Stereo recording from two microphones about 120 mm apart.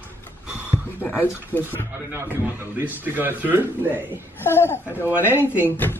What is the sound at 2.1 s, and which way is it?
A man's voice, 20° right (ahead or behind).